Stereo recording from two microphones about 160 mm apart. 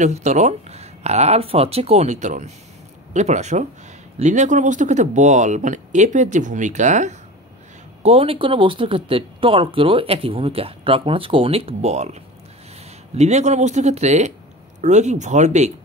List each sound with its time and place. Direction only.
0.0 s speech: 45° right (ahead or behind)
8.0 s speech: 35° right (ahead or behind)